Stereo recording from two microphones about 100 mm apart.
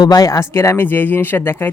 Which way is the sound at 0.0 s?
40° left (ahead or behind).